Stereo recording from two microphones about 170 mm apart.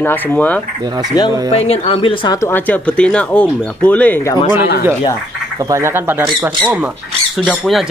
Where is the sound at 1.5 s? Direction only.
35° left (ahead or behind).